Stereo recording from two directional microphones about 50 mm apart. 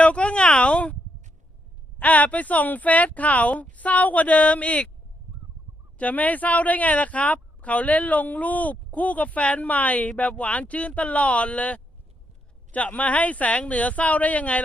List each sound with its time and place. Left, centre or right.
0.0 s a sound: left
2.0 s speech: left
6.0 s speech: left